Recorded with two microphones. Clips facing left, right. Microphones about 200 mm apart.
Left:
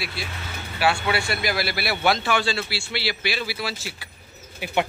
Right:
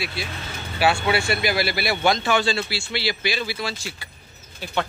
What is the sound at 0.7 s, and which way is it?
Speech, 25° right (ahead or behind).